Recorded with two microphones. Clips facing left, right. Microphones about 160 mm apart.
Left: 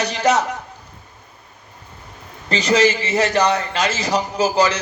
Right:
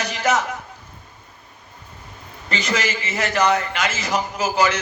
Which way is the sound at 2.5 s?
35° left (ahead or behind).